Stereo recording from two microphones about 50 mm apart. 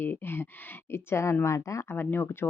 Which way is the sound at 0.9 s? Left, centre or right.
Left.